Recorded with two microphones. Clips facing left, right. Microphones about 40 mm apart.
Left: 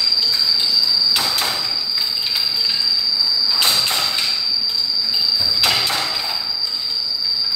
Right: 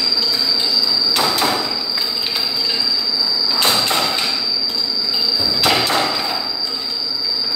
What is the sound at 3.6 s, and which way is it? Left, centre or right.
Thump, right.